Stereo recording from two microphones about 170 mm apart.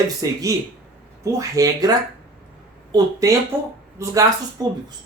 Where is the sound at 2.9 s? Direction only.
20° right (ahead or behind).